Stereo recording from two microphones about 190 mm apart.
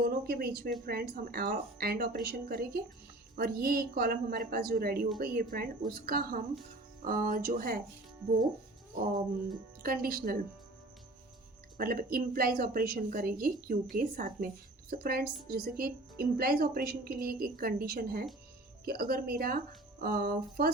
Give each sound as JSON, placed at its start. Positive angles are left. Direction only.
{"t": 0.0, "sound": "a woman's voice", "side_deg": -55}
{"t": 9.8, "sound": "a woman's voice", "side_deg": -50}
{"t": 11.8, "sound": "a woman's voice", "side_deg": -50}